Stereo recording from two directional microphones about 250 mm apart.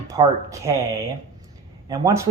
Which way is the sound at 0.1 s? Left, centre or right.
Centre.